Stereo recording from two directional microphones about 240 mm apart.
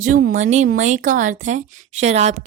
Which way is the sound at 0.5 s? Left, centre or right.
Right.